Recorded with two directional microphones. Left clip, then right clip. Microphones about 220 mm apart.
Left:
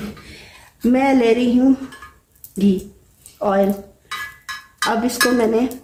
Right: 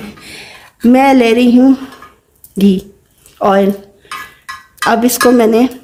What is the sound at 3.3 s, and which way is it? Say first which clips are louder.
Speech: right 7 dB; 45° right (ahead or behind).